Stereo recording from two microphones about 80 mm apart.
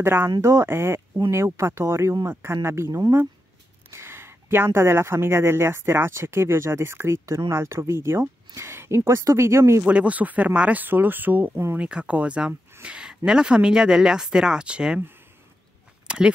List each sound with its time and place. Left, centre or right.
0.0 s speech: right
9.8 s speech: centre
16.1 s a sound: centre